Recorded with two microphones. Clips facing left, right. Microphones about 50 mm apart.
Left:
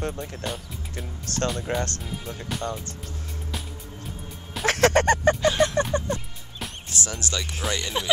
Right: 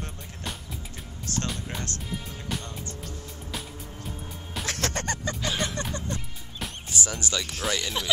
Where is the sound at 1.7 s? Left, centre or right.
Left.